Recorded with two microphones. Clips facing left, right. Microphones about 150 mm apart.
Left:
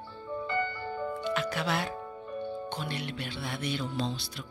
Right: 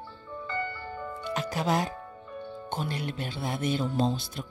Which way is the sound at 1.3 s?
40° right (ahead or behind).